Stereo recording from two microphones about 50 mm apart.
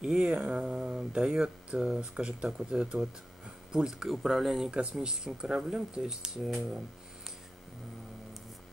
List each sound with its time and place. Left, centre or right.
0.2 s speech: right
4.1 s speech: centre
4.6 s speech: centre